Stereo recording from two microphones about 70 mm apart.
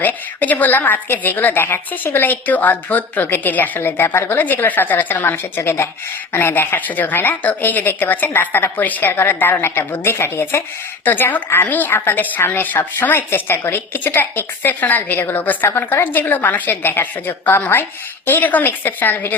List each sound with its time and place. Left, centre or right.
0.0 s a woman's voice: left